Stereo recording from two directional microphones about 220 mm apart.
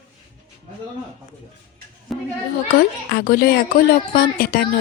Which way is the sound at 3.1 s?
45° left (ahead or behind).